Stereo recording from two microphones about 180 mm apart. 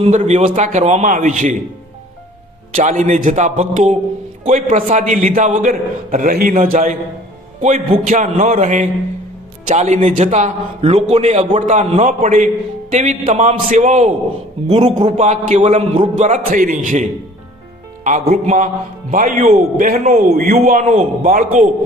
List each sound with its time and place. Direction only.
0.0 s a man's voice: 40° right (ahead or behind)
2.7 s a man's voice: 45° right (ahead or behind)